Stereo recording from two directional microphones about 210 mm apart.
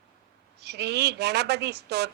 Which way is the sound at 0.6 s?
55° right (ahead or behind).